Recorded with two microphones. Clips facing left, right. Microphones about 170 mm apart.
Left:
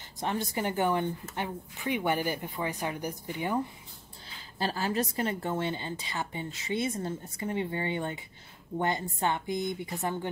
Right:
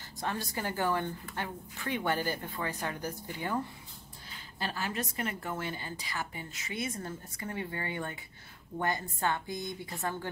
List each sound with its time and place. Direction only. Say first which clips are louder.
0.2 s a woman's voice: left 4 dB; 20° left (ahead or behind)
4.6 s a woman's voice: left 6 dB; 30° left (ahead or behind)